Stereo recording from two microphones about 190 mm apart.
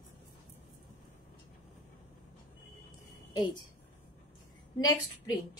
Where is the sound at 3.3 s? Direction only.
25° left (ahead or behind).